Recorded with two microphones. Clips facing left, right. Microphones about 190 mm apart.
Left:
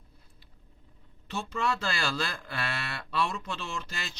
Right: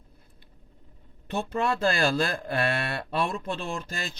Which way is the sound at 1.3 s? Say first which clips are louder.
Right 4 dB; 55° right (ahead or behind).